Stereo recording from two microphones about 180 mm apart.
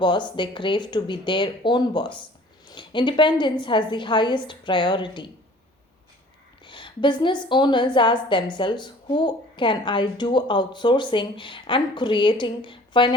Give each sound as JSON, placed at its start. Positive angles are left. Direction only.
{"t": 0.0, "sound": "a woman's voice", "side_deg": 25}
{"t": 6.7, "sound": "a woman's voice", "side_deg": 25}